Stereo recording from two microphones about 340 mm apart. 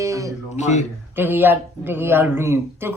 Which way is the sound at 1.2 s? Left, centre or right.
Centre.